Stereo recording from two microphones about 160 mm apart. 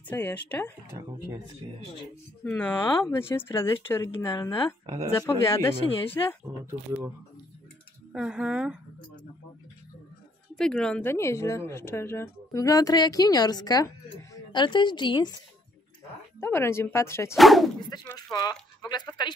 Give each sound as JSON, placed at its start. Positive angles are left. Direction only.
{"t": 0.1, "sound": "a woman's voice", "side_deg": 10}
{"t": 2.4, "sound": "a woman's voice", "side_deg": 5}
{"t": 6.4, "sound": "speech", "side_deg": -15}
{"t": 8.1, "sound": "speech", "side_deg": -5}
{"t": 10.5, "sound": "a woman's voice", "side_deg": 5}
{"t": 16.3, "sound": "a woman's voice", "side_deg": 15}
{"t": 17.4, "sound": "speech", "side_deg": 0}
{"t": 18.1, "sound": "speech", "side_deg": 25}